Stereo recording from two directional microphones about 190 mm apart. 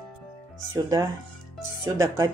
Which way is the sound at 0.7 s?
15° right (ahead or behind).